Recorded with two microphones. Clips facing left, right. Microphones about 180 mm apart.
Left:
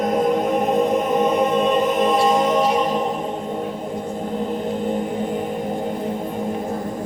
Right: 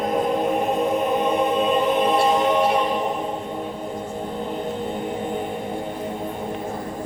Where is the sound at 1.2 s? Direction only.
45° left (ahead or behind).